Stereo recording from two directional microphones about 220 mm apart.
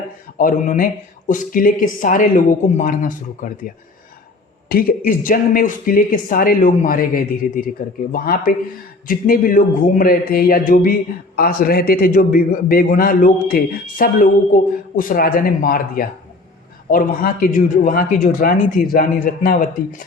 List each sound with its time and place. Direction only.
0.3 s a man's voice: 35° left (ahead or behind)
4.7 s a man's voice: 40° left (ahead or behind)